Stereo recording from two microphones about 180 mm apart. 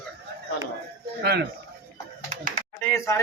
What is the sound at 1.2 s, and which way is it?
Speech, 60° right (ahead or behind).